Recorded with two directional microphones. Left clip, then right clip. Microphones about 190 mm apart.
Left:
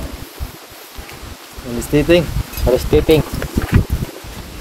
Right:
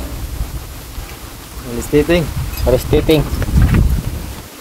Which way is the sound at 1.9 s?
65° left (ahead or behind).